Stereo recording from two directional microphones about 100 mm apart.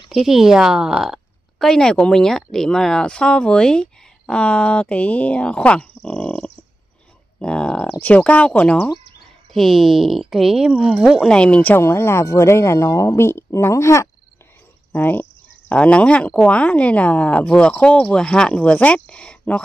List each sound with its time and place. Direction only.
0.1 s speech: 5° right (ahead or behind)
11.2 s speech: 10° left (ahead or behind); by 14.0 s 30° left (ahead or behind)
14.9 s cricket: 15° left (ahead or behind)
15.7 s speech: 10° left (ahead or behind)